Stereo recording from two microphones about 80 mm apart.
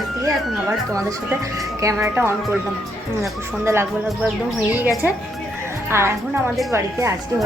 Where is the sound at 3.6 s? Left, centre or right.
Right.